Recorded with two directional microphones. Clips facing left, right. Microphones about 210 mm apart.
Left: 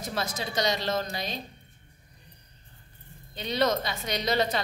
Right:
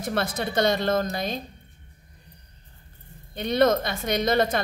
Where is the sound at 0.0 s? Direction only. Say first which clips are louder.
Right 6 dB; 55° right (ahead or behind).